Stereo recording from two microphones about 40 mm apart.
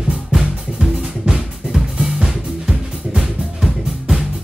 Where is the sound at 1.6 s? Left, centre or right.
Centre.